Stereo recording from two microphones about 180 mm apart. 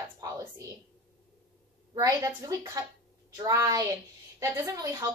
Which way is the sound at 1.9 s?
20° right (ahead or behind).